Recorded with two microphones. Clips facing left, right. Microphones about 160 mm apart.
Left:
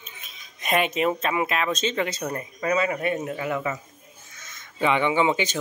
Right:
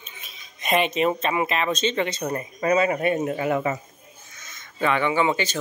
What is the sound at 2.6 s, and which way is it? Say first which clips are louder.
Speech: right 3 dB; 25° right (ahead or behind).